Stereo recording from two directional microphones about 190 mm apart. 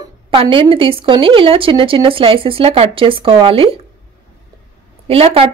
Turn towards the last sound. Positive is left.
turn(degrees=-30)  # may be behind; listen again after turning